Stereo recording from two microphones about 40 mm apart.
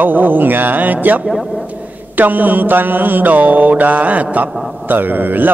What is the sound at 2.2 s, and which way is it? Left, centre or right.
A man's voice, right.